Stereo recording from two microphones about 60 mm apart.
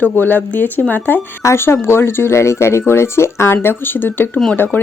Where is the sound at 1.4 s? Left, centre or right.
Left.